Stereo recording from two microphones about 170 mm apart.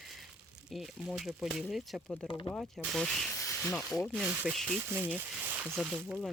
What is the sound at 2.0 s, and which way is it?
Speech, 20° left (ahead or behind).